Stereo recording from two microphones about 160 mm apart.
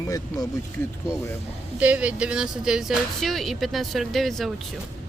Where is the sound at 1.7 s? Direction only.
5° right (ahead or behind).